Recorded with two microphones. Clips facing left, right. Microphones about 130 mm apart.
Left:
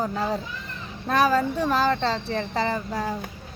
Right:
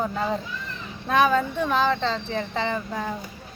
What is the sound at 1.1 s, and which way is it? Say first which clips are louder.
Speech: right 1 dB; 35° left (ahead or behind).